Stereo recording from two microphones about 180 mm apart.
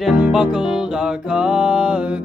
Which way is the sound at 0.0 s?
5° right (ahead or behind).